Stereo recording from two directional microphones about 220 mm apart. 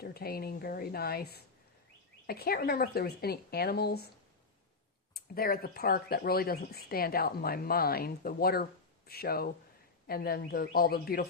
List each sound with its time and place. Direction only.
0.0 s speech: 45° left (ahead or behind)
5.1 s speech: 40° left (ahead or behind)